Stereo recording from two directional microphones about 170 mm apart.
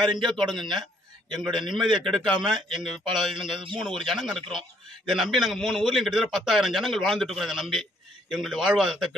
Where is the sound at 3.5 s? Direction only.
30° right (ahead or behind).